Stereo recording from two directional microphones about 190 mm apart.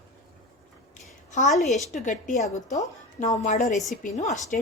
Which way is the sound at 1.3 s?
40° left (ahead or behind).